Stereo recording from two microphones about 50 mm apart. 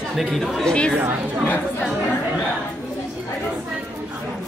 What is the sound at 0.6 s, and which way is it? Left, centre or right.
Speech, centre.